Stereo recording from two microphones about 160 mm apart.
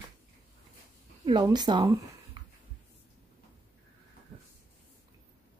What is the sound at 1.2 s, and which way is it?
Speech, 25° right (ahead or behind).